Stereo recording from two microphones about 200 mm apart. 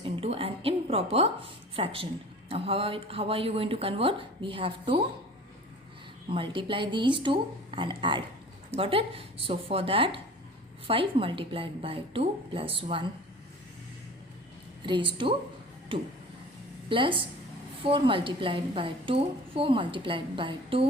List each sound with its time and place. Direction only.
0.0 s a sound: 30° right (ahead or behind)
2.5 s a woman's voice: 30° right (ahead or behind)
6.3 s a woman's voice: 25° right (ahead or behind)
14.8 s a woman's voice: 25° right (ahead or behind)